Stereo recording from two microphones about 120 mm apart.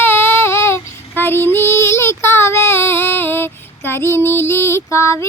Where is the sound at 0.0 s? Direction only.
20° left (ahead or behind).